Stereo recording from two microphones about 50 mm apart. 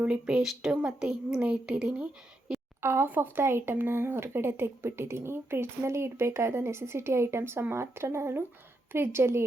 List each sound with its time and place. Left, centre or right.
0.0 s a woman's voice: right
2.8 s a woman's voice: right